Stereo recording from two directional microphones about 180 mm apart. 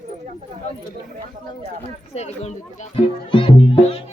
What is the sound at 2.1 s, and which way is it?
Speech, 35° left (ahead or behind).